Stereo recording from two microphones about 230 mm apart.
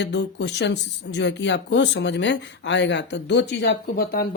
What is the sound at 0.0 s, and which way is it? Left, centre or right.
Speech, left.